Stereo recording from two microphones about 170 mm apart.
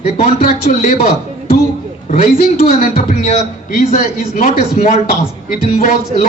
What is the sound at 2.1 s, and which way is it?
A man's voice, 55° left (ahead or behind).